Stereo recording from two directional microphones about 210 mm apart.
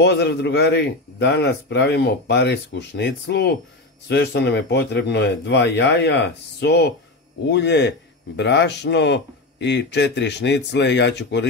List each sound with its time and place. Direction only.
0.0 s a man's voice: 55° left (ahead or behind)